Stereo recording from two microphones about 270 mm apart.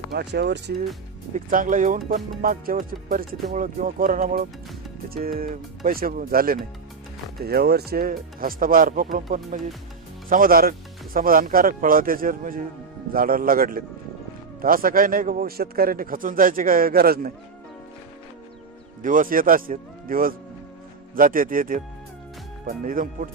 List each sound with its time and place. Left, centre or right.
0.1 s speech: right
19.0 s speech: right